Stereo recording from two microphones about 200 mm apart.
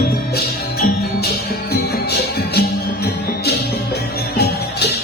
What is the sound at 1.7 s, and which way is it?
Music, 55° left (ahead or behind).